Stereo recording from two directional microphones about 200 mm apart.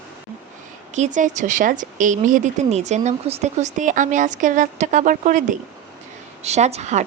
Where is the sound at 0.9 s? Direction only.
35° right (ahead or behind).